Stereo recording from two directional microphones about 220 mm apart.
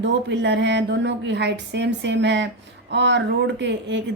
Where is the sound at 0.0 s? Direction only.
55° right (ahead or behind).